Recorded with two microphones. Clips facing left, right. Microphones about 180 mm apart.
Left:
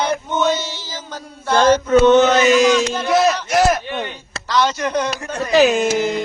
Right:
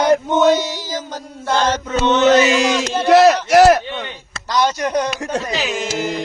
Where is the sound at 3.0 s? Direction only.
75° right (ahead or behind).